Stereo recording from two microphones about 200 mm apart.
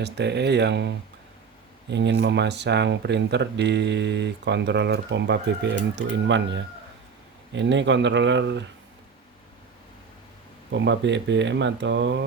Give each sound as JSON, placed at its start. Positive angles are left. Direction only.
{"t": 0.0, "sound": "speech", "side_deg": -60}
{"t": 1.9, "sound": "speech", "side_deg": -60}
{"t": 10.7, "sound": "speech", "side_deg": -60}